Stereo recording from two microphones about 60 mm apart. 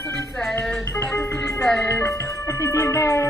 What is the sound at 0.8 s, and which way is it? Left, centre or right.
Music, left.